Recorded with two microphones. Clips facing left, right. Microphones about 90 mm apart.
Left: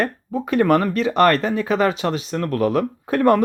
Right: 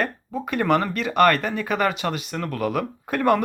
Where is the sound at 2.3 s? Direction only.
Centre (ahead or behind).